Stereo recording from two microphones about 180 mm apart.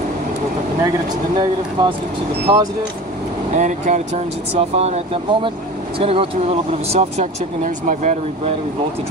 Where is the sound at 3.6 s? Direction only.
40° right (ahead or behind).